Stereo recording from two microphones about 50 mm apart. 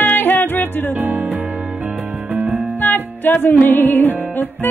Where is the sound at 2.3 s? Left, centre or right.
Right.